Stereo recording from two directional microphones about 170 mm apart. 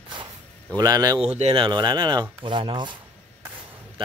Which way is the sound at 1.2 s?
40° right (ahead or behind).